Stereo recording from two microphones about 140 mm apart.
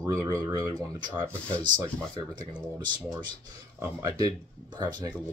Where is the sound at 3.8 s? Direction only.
25° right (ahead or behind).